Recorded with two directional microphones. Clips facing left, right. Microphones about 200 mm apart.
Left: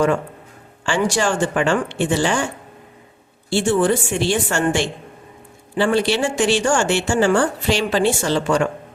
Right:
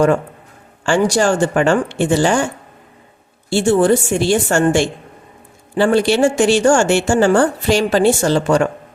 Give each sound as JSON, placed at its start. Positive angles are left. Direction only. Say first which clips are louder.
{"t": 0.9, "sound": "a woman's voice", "louder": "right 5 dB", "side_deg": -45}
{"t": 3.5, "sound": "a woman's voice", "louder": "right 4 dB", "side_deg": -40}